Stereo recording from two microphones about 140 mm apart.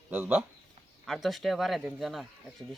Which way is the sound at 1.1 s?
Centre (ahead or behind).